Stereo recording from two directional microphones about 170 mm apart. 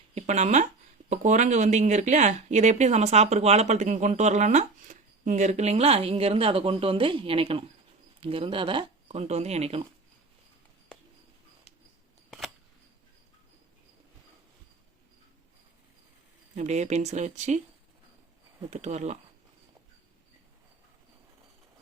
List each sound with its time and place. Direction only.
0.1 s speech: 40° right (ahead or behind)
16.6 s speech: 40° right (ahead or behind)
18.7 s speech: 45° right (ahead or behind)